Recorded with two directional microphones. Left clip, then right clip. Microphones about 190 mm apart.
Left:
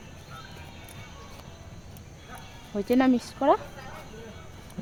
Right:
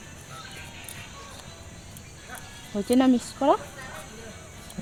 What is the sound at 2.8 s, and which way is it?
Speech, 15° right (ahead or behind).